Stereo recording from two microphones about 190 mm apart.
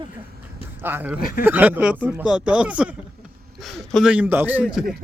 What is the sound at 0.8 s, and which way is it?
Speech, 10° right (ahead or behind).